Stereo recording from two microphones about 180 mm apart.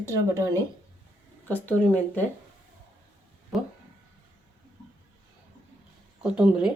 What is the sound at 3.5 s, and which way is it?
Speech, centre (ahead or behind).